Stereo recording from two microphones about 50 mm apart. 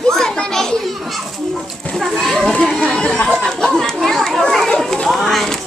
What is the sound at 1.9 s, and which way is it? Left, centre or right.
Children playing, centre.